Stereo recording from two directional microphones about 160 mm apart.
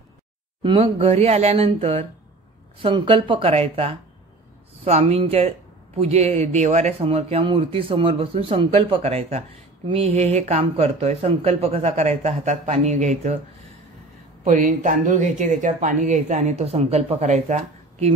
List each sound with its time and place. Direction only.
0.6 s speech: 30° right (ahead or behind)
14.4 s speech: 55° right (ahead or behind)